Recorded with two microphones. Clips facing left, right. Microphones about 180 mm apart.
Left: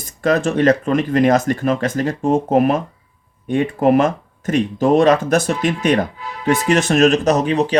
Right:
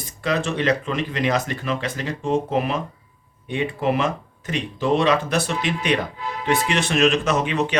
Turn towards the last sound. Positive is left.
turn(degrees=35)  # may be behind; listen again after turning